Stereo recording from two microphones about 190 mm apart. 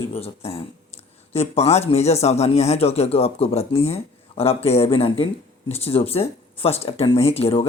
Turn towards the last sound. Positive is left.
turn(degrees=30)  # may be behind; listen again after turning